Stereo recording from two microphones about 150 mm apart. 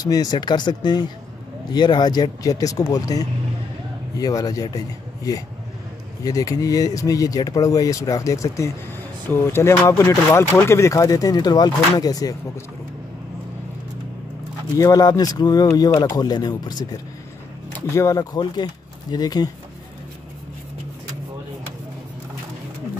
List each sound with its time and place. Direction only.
0.0 s speech: 25° left (ahead or behind)
14.8 s speech: 25° left (ahead or behind)